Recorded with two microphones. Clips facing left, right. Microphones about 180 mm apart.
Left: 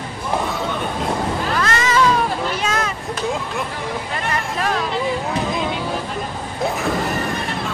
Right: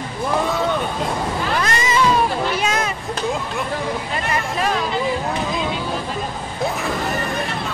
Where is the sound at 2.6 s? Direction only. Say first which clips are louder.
Right 1 dB; 15° right (ahead or behind).